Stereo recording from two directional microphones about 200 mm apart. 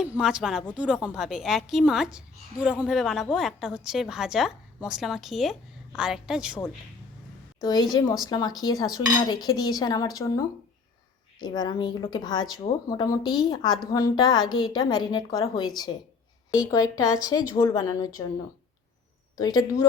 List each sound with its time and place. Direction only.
0.0 s a woman's voice: 5° right (ahead or behind)
7.6 s a woman's voice: 20° left (ahead or behind)
11.3 s a woman's voice: 20° left (ahead or behind)
19.4 s a woman's voice: 20° left (ahead or behind)